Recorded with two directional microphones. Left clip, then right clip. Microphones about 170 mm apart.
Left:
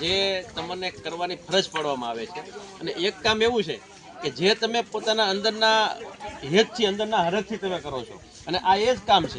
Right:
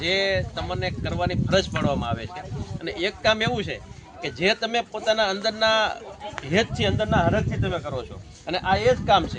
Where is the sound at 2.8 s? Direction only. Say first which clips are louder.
Right 1 dB; 15° right (ahead or behind).